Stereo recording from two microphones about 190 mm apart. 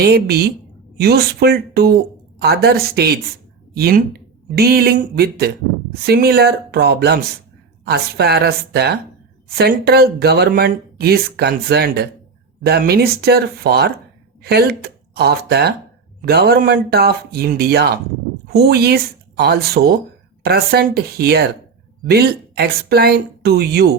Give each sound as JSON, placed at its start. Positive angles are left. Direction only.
{"t": 0.0, "sound": "speech", "side_deg": -60}